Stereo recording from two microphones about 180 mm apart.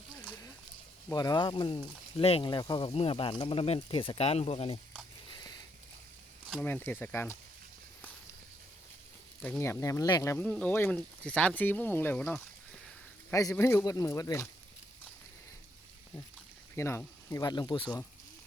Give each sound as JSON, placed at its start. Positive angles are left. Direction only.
{"t": 1.1, "sound": "speech", "side_deg": 20}
{"t": 5.3, "sound": "a sound", "side_deg": 20}
{"t": 6.6, "sound": "speech", "side_deg": 10}
{"t": 9.4, "sound": "speech", "side_deg": 10}
{"t": 13.3, "sound": "speech", "side_deg": 20}
{"t": 16.7, "sound": "speech", "side_deg": 15}